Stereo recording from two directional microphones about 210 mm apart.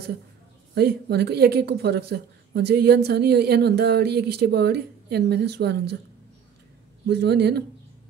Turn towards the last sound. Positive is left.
turn(degrees=-50)  # may be behind; listen again after turning